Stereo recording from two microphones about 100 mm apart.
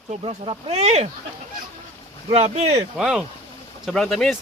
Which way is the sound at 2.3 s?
90° right.